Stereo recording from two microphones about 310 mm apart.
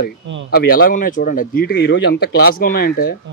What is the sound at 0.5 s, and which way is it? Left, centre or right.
Speech, left.